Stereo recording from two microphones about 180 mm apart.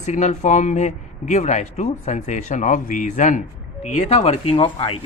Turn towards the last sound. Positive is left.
turn(degrees=30)  # may be behind; listen again after turning